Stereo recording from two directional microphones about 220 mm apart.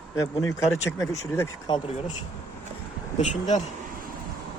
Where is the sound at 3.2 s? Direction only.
30° left (ahead or behind).